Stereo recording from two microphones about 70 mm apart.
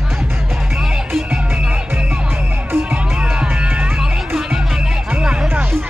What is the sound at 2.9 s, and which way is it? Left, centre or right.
Music, centre.